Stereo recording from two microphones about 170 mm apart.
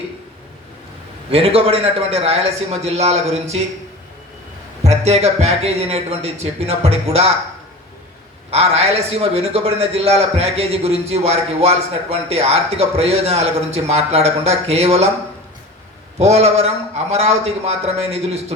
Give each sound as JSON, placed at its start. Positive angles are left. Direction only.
{"t": 1.3, "sound": "a man's voice", "side_deg": -35}
{"t": 4.8, "sound": "a man's voice", "side_deg": -40}
{"t": 8.4, "sound": "a man's voice", "side_deg": -35}
{"t": 16.1, "sound": "a man's voice", "side_deg": -40}